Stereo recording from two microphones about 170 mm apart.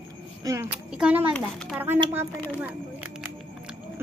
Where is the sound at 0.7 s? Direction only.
5° right (ahead or behind).